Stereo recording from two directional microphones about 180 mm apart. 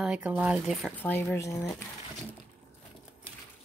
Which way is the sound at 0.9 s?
10° left (ahead or behind).